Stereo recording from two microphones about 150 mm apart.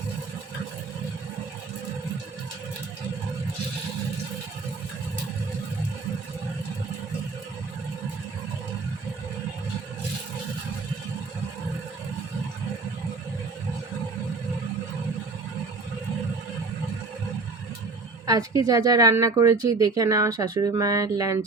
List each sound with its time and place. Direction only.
18.3 s a woman's voice: 20° right (ahead or behind)